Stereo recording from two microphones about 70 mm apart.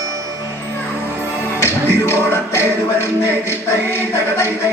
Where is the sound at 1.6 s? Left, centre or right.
Left.